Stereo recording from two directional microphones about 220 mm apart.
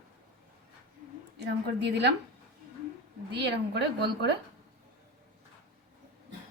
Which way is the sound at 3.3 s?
50° right (ahead or behind).